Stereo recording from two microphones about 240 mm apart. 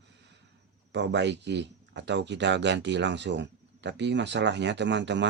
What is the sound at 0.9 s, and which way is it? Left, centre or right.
Speech, right.